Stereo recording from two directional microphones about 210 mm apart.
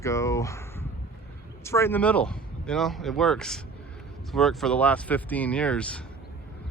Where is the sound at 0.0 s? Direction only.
15° left (ahead or behind).